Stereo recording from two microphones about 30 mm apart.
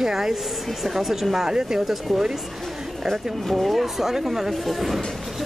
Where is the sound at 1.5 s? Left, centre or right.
Right.